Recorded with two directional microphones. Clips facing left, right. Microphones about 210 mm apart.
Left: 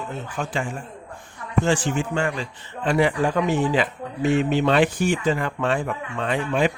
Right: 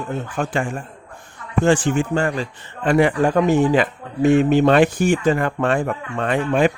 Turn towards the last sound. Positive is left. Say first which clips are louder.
# right 4 dB
turn(degrees=-55)  # may be behind; listen again after turning